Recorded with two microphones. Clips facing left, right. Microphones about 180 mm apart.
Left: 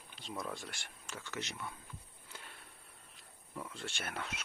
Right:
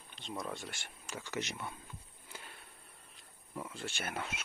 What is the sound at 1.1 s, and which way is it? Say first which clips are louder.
Speech: right 4 dB; 15° right (ahead or behind).